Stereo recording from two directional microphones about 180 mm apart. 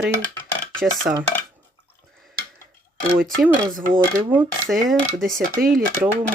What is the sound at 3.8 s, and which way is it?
Coin, 50° right (ahead or behind).